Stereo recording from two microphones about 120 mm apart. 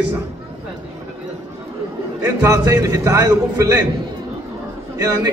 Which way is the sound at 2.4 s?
30° right (ahead or behind).